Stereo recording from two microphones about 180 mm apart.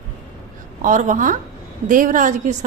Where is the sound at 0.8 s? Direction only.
45° right (ahead or behind).